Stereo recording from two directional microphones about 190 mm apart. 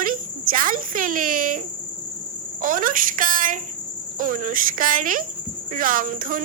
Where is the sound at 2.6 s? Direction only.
45° right (ahead or behind).